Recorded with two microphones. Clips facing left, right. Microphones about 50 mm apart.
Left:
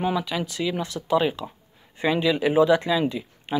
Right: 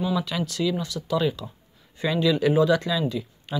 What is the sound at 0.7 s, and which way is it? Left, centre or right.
Speech, left.